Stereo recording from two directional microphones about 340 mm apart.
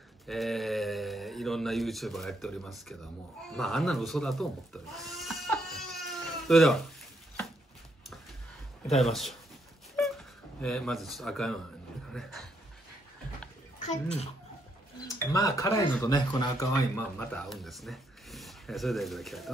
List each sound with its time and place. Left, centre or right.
0.3 s speech: centre
4.9 s goat: centre
8.8 s speech: centre
13.7 s a child's voice: centre